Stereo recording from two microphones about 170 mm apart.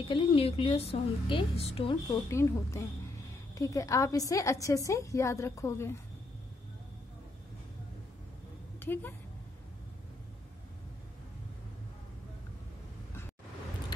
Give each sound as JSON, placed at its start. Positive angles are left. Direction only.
{"t": 0.1, "sound": "a woman's voice", "side_deg": 30}
{"t": 2.2, "sound": "a woman's voice", "side_deg": 15}
{"t": 8.7, "sound": "a woman's voice", "side_deg": 10}